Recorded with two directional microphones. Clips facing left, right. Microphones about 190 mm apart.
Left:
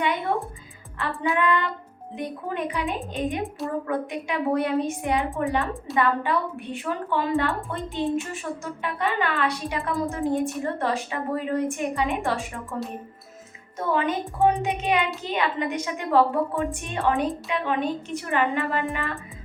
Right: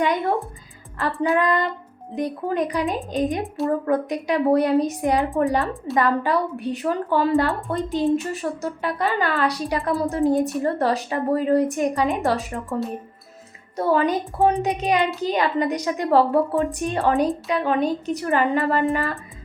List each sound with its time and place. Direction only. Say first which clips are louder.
0.0 s a woman's voice: right 4 dB; 40° right (ahead or behind)
1.4 s a woman's voice: right 2 dB; 40° right (ahead or behind)
13.7 s a woman's voice: right 5 dB; 35° right (ahead or behind)